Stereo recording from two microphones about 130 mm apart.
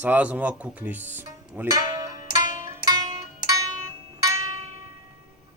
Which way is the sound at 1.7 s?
30° right (ahead or behind).